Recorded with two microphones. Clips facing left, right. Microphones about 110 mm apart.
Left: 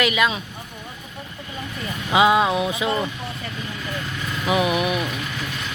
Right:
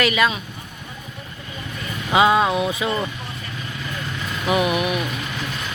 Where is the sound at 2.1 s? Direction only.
10° left (ahead or behind).